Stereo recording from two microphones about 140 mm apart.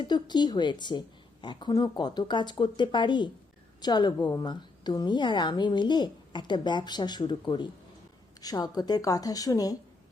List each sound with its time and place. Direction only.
0.0 s a woman's voice: 30° left (ahead or behind)